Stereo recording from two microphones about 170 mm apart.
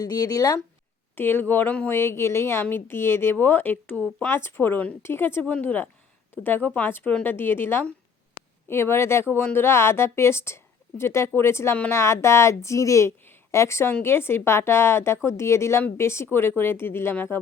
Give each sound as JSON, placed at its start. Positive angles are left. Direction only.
{"t": 0.0, "sound": "speech", "side_deg": 25}
{"t": 1.1, "sound": "a woman's voice", "side_deg": 10}